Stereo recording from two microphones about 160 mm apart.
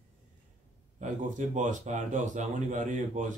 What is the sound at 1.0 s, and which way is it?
Speech, 50° right (ahead or behind).